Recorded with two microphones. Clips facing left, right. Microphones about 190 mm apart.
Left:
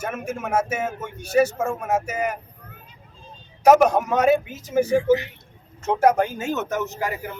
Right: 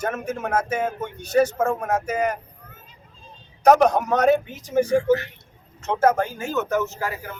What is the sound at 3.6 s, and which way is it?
Speech, 10° left (ahead or behind).